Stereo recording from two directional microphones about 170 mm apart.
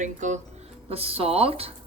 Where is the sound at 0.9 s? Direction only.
35° right (ahead or behind).